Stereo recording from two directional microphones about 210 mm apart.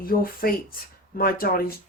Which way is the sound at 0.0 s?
45° left (ahead or behind).